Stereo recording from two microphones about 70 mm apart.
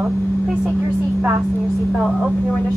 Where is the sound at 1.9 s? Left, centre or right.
Centre.